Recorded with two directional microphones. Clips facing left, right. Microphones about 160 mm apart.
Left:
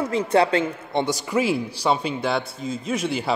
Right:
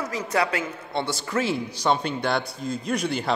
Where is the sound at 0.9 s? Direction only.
15° left (ahead or behind).